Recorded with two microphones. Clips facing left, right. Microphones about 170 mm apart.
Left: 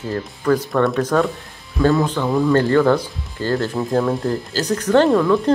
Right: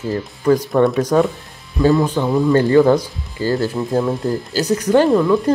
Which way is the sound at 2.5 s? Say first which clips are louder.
Right 4 dB; 15° right (ahead or behind).